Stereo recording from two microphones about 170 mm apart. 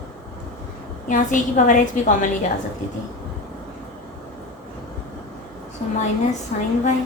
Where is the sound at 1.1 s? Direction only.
50° left (ahead or behind).